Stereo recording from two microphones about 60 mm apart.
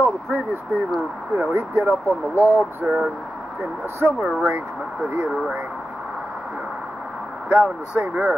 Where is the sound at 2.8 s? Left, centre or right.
Centre.